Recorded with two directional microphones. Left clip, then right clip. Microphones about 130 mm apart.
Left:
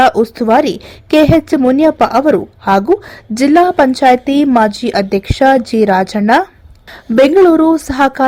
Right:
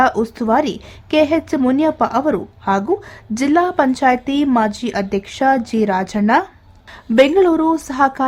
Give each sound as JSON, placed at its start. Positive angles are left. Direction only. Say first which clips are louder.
{"t": 0.0, "sound": "a woman's voice", "louder": "left 6 dB", "side_deg": 30}